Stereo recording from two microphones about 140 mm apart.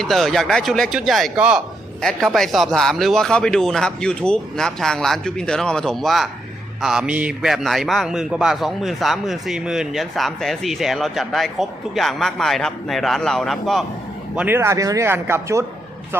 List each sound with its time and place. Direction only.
0.0 s a man's voice: centre (ahead or behind)
14.3 s speech: 15° right (ahead or behind)